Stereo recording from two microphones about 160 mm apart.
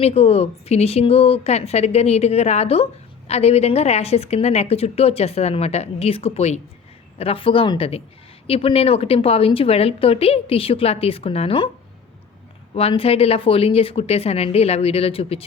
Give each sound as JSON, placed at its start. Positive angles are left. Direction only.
{"t": 0.0, "sound": "a woman's voice", "side_deg": 40}
{"t": 12.7, "sound": "a woman's voice", "side_deg": 35}